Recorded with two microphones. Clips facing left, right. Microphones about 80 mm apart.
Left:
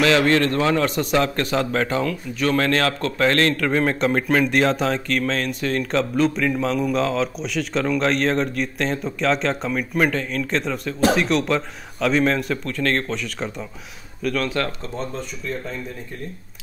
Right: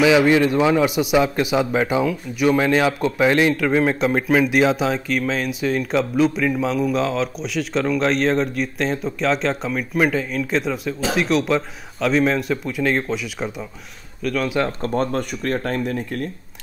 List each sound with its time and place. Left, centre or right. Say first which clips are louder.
0.0 s speech: right 3 dB; centre
14.8 s speech: right 8 dB; right